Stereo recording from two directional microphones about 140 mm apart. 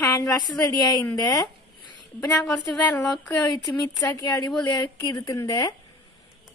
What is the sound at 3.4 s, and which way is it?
A woman's voice, 25° left (ahead or behind).